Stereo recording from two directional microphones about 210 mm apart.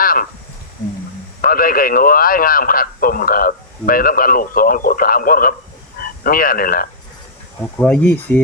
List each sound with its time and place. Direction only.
0.0 s snake: 45° left (ahead or behind)
1.4 s a man's voice: 45° left (ahead or behind)
7.6 s speech: 5° left (ahead or behind)